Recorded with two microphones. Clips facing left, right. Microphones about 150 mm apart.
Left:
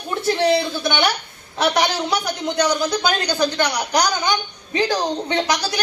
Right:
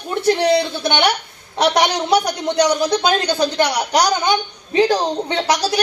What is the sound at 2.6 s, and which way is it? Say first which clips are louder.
A woman's voice: right 4 dB; 30° right (ahead or behind).